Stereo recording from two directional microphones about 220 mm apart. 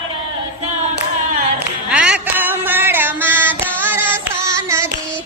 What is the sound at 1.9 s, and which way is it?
Music, 5° right (ahead or behind).